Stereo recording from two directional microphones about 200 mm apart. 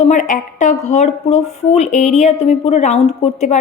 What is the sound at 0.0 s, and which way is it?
A woman's voice, 40° left (ahead or behind).